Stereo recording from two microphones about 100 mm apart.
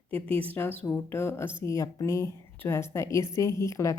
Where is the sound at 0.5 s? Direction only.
20° left (ahead or behind).